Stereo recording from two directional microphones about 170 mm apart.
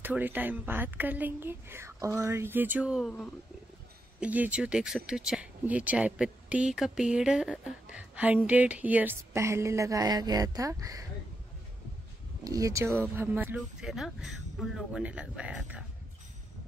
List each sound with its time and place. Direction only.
0.0 s a woman's voice: 10° right (ahead or behind)
4.2 s a woman's voice: 10° right (ahead or behind)
12.4 s speech: 20° right (ahead or behind)